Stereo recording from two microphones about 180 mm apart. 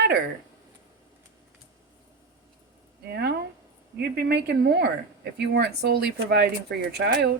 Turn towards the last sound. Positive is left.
turn(degrees=-60)  # may be behind; listen again after turning